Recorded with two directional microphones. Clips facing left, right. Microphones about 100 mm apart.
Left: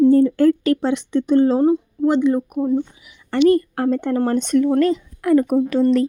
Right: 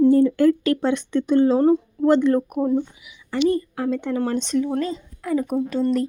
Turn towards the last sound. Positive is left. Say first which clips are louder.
# left 5 dB
turn(degrees=80)